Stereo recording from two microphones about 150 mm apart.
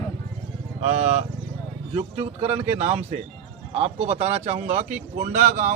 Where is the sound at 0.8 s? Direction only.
45° right (ahead or behind).